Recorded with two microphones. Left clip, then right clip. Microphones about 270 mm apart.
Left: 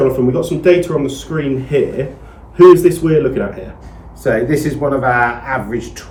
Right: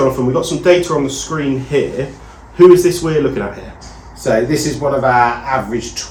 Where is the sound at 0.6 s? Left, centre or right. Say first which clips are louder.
Even; centre.